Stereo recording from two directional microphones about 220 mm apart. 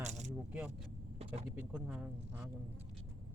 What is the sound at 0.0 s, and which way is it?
Vehicle, 30° right (ahead or behind).